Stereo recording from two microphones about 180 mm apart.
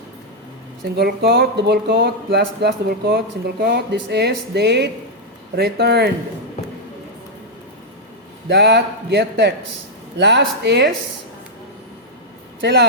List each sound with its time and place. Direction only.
0.9 s speech: 65° right (ahead or behind)
8.4 s speech: 70° right (ahead or behind)
12.5 s speech: 70° right (ahead or behind)